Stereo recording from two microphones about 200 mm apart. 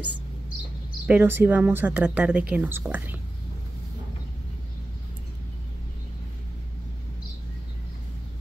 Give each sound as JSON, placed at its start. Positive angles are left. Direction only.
{"t": 1.0, "sound": "a woman's voice", "side_deg": -10}